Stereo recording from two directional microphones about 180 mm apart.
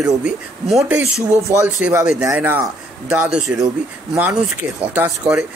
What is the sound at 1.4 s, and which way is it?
Speech, 15° right (ahead or behind).